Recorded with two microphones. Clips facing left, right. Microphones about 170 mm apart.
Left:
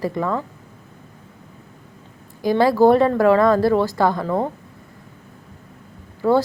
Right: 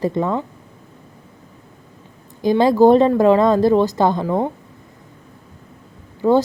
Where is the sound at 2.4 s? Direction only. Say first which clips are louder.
Right 2 dB; 20° right (ahead or behind).